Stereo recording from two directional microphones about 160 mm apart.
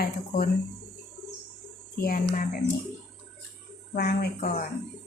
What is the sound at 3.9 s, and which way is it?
Speech, 70° left (ahead or behind).